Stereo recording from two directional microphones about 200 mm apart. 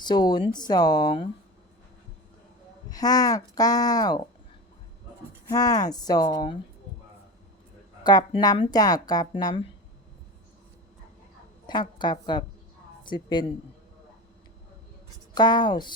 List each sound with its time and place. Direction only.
0.0 s a woman's voice: 20° left (ahead or behind)
2.9 s a woman's voice: 20° left (ahead or behind)
5.5 s a woman's voice: 20° left (ahead or behind)
8.0 s a woman's voice: 20° left (ahead or behind)
11.6 s a woman's voice: 20° left (ahead or behind)
15.4 s a woman's voice: 20° left (ahead or behind)